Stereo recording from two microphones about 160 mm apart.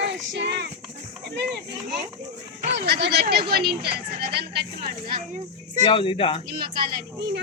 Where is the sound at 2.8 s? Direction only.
90° right.